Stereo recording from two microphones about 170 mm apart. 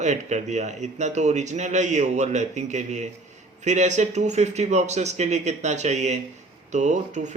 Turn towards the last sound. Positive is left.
turn(degrees=-45)  # may be behind; listen again after turning